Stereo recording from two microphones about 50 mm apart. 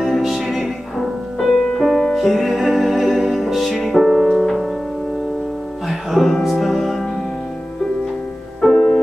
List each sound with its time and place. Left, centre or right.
0.2 s music: centre
5.9 s music: centre
8.7 s music: centre